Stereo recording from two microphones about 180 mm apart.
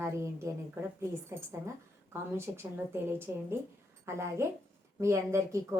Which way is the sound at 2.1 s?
15° right (ahead or behind).